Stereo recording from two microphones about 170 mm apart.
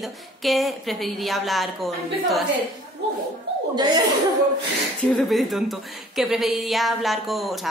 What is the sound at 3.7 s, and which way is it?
Speech, 25° right (ahead or behind).